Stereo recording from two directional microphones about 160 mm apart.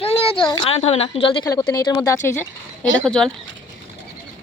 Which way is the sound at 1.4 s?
20° left (ahead or behind).